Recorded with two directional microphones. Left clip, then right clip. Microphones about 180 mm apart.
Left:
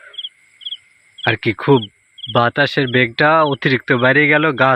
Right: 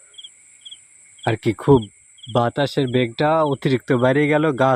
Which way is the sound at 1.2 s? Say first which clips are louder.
Left 4 dB; 10° right (ahead or behind).